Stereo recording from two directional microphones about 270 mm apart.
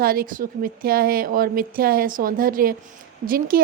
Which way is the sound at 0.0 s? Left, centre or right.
Right.